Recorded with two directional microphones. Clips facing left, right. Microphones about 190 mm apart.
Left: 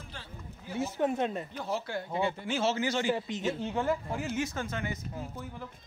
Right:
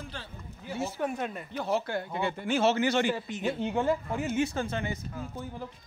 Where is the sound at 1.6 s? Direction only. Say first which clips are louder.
Right 7 dB; 60° right (ahead or behind).